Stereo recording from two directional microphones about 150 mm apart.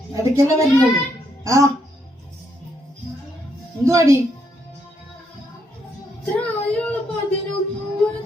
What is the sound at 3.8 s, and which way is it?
Speech, 20° right (ahead or behind).